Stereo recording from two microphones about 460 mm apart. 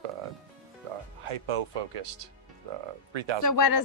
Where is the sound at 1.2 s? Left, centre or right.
Right.